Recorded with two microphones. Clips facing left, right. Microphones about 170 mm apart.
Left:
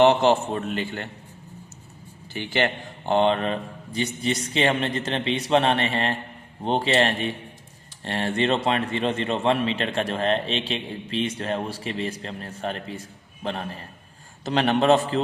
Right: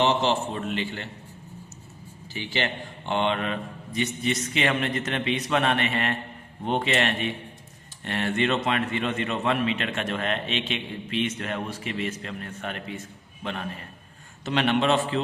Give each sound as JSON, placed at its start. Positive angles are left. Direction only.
{"t": 0.0, "sound": "a man's voice", "side_deg": 55}
{"t": 2.3, "sound": "a man's voice", "side_deg": 55}
{"t": 3.1, "sound": "a man's voice", "side_deg": 35}